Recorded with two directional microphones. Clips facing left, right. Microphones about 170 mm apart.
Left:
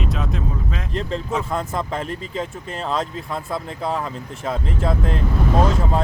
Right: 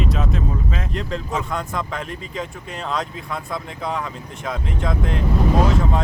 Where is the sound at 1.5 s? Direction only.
30° left (ahead or behind).